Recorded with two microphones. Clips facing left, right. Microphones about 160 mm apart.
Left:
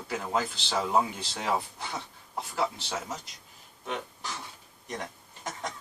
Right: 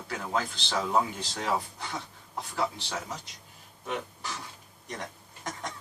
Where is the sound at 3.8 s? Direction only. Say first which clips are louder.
Right 1 dB; centre (ahead or behind).